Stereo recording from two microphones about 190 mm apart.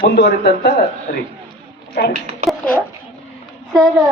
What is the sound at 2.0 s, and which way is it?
Speech, 55° left (ahead or behind).